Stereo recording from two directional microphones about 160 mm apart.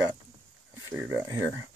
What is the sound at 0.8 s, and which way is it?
Speech, 15° right (ahead or behind).